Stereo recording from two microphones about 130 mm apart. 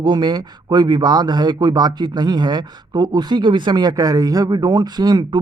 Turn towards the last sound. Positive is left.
turn(degrees=-30)  # may be behind; listen again after turning